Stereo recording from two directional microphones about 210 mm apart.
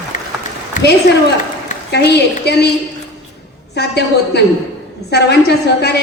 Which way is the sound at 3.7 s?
50° left (ahead or behind).